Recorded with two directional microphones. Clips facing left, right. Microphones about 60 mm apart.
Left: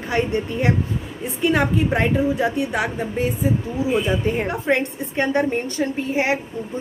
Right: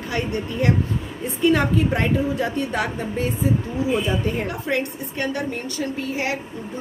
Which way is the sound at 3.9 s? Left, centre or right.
Left.